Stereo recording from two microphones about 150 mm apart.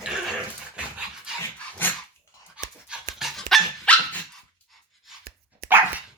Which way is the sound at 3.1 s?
Centre (ahead or behind).